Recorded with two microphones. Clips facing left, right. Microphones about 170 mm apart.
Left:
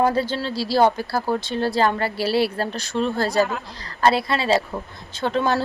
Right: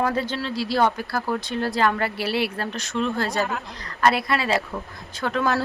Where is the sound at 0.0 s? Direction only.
30° left (ahead or behind).